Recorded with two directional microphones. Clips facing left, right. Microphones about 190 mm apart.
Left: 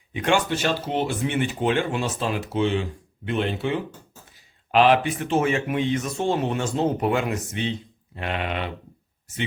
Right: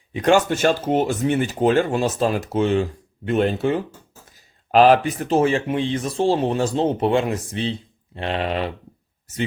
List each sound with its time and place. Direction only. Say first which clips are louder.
0.1 s speech: right 5 dB; 40° right (ahead or behind)